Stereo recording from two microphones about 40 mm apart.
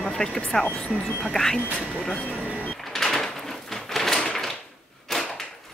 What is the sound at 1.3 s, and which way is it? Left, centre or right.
Speech, centre.